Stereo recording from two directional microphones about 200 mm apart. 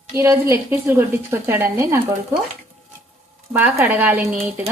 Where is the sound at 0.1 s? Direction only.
15° right (ahead or behind).